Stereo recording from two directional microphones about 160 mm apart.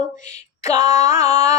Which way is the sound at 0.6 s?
20° right (ahead or behind).